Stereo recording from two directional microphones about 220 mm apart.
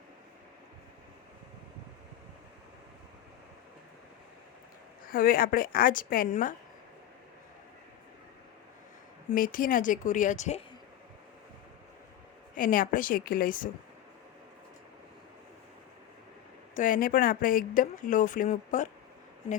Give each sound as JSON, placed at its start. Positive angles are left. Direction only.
{"t": 5.0, "sound": "speech", "side_deg": 40}
{"t": 9.3, "sound": "speech", "side_deg": 40}
{"t": 12.5, "sound": "speech", "side_deg": 40}
{"t": 16.7, "sound": "speech", "side_deg": 40}